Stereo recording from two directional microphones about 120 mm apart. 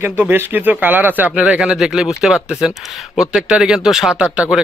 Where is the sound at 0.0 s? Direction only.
20° right (ahead or behind).